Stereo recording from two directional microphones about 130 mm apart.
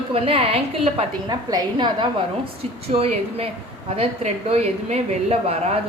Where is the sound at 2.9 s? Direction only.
50° right (ahead or behind).